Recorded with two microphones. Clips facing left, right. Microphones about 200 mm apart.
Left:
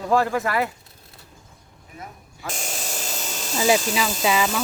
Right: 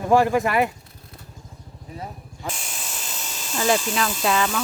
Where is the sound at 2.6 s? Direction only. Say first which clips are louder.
Left 5 dB; 45° left (ahead or behind).